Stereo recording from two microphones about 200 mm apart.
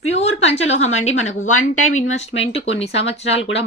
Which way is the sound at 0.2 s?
30° left (ahead or behind).